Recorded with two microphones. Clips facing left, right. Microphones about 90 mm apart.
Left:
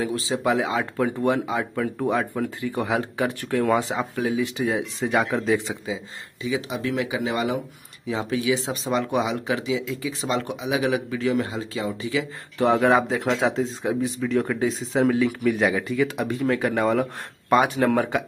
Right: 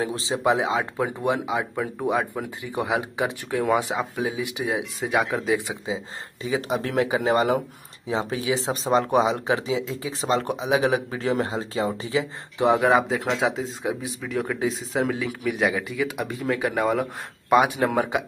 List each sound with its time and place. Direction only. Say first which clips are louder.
0.0 s speech: even; 25° right (ahead or behind); by 5.8 s 10° right (ahead or behind)
6.4 s speech: right 1 dB; 40° right (ahead or behind)
8.1 s speech: left 1 dB; 30° right (ahead or behind)
12.5 s speech: even; 15° right (ahead or behind)
12.8 s speech: left 1 dB; centre (ahead or behind)